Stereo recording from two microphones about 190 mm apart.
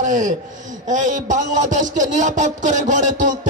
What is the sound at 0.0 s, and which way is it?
A man's voice, 40° right (ahead or behind).